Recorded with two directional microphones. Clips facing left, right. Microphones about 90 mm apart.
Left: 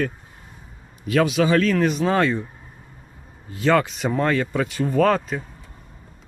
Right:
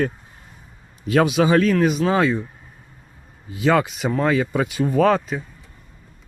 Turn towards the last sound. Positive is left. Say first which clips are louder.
# right 1 dB
turn(degrees=0)  # may be behind; listen again after turning